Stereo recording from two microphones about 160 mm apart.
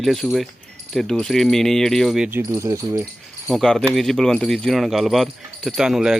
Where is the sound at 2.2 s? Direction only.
15° right (ahead or behind).